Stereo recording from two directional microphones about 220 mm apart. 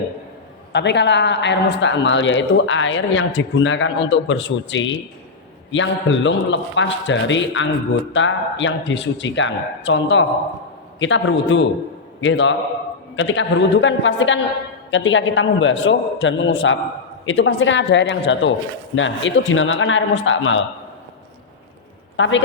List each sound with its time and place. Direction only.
0.7 s a man's voice: 50° left (ahead or behind)
22.1 s a man's voice: 60° left (ahead or behind)